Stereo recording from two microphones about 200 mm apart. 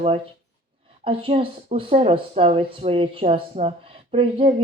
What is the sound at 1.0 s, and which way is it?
Speech, 25° right (ahead or behind).